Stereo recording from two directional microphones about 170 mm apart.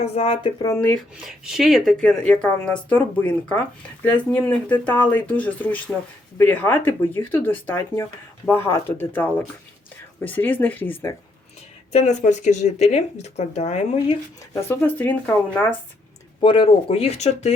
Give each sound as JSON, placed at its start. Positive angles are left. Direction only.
{"t": 0.0, "sound": "speech", "side_deg": 35}
{"t": 0.6, "sound": "speech", "side_deg": 15}
{"t": 1.5, "sound": "a woman's voice", "side_deg": 0}
{"t": 11.9, "sound": "speech", "side_deg": 40}
{"t": 14.7, "sound": "speech", "side_deg": 10}
{"t": 16.4, "sound": "speech", "side_deg": 30}